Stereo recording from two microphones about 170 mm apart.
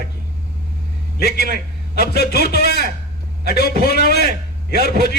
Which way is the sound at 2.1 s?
65° left (ahead or behind).